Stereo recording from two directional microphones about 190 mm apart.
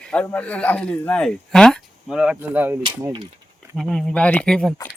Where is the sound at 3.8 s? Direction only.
5° left (ahead or behind).